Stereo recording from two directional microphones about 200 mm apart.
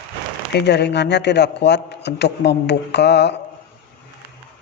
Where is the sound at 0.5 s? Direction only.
55° left (ahead or behind).